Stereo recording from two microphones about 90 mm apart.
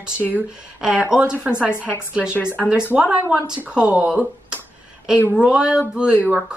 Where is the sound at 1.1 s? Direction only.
10° right (ahead or behind).